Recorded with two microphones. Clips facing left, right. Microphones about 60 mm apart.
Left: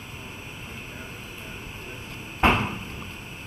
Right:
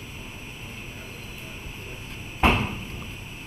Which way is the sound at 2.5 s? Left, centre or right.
Centre.